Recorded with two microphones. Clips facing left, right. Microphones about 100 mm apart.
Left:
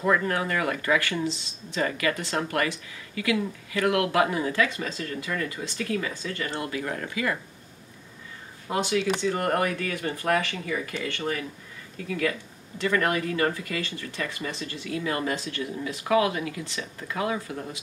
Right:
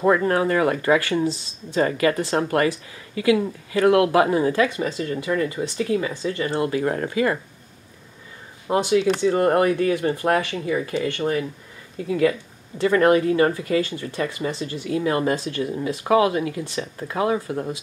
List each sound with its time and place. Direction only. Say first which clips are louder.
0.0 s speech: right 6 dB; 35° right (ahead or behind)
4.6 s speech: right 7 dB; 20° right (ahead or behind)
6.5 s speech: right 8 dB; 35° right (ahead or behind)
8.6 s speech: right 6 dB; 25° right (ahead or behind)